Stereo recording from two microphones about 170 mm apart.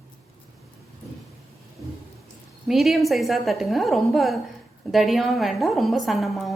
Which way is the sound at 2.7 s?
Centre (ahead or behind).